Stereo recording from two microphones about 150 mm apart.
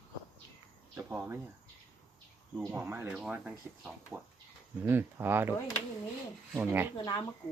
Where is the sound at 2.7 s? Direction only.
15° right (ahead or behind).